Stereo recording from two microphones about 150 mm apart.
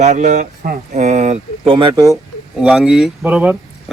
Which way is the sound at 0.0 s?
55° right (ahead or behind).